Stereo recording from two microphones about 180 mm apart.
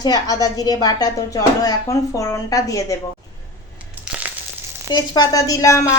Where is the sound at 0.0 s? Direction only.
20° left (ahead or behind).